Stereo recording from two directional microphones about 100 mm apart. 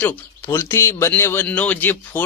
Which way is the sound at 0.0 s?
20° left (ahead or behind).